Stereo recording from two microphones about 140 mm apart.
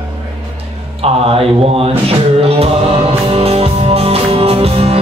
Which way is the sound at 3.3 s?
45° right (ahead or behind).